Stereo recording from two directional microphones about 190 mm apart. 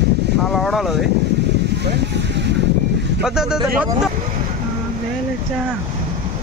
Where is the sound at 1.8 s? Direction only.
60° right (ahead or behind).